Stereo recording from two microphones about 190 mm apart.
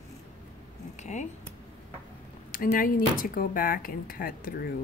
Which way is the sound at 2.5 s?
45° left (ahead or behind).